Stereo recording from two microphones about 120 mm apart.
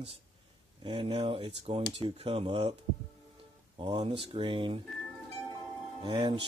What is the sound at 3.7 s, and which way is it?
Speech, 40° right (ahead or behind).